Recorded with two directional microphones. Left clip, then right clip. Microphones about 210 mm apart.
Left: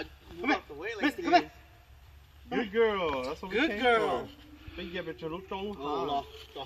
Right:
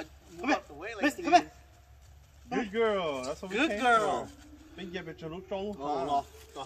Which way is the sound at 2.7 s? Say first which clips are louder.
Left 2 dB; 40° right (ahead or behind).